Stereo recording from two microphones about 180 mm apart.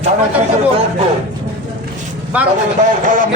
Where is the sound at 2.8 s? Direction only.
45° right (ahead or behind).